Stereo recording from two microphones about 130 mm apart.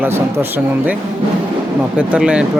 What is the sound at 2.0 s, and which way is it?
Speech, 10° right (ahead or behind).